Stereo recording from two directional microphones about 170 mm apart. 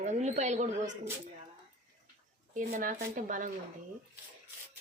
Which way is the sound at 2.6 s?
50° right (ahead or behind).